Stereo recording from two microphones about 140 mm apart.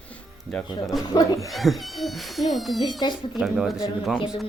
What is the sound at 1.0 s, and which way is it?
Speech, 25° left (ahead or behind).